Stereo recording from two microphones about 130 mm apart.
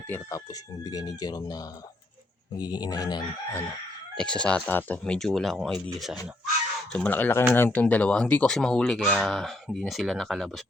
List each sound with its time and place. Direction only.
0.1 s speech: 25° left (ahead or behind)
4.2 s speech: 5° left (ahead or behind)
6.9 s speech: 10° left (ahead or behind)